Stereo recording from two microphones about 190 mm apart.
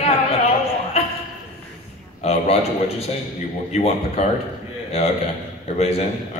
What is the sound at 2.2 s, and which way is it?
A man's voice, 35° left (ahead or behind).